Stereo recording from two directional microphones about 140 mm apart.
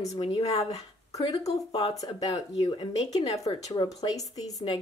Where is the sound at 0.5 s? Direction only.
50° left (ahead or behind).